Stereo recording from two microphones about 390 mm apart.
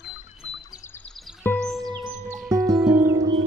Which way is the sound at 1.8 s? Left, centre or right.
Centre.